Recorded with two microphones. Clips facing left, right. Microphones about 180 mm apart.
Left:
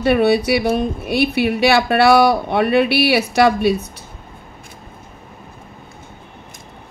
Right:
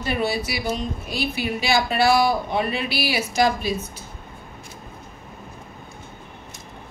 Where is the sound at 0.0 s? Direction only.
65° left (ahead or behind).